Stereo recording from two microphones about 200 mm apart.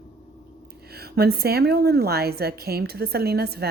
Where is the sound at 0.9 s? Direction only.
50° right (ahead or behind).